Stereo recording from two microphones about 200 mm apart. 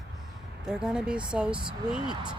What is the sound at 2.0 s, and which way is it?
Speech, 25° right (ahead or behind).